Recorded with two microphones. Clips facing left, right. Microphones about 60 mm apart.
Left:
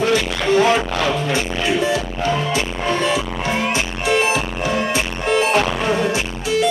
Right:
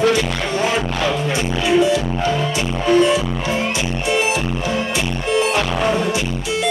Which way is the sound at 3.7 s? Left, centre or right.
Left.